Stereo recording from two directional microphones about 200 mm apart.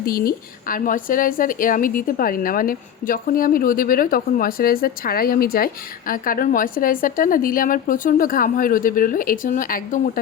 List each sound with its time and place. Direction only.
0.0 s speech: 50° left (ahead or behind)